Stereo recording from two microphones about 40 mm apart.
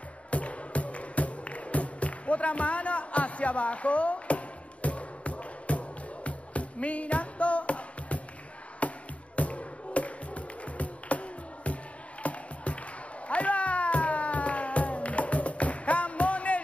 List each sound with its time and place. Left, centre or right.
0.3 s music: left
13.3 s cat: left